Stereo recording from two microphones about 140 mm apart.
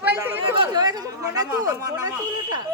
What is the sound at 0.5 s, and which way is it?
Chatter, 30° right (ahead or behind).